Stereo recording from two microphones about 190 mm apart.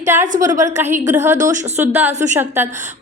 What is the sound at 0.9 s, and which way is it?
Speech, 40° right (ahead or behind).